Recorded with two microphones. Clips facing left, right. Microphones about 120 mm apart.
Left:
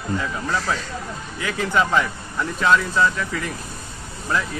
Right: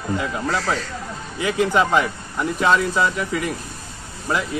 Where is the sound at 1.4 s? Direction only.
15° right (ahead or behind).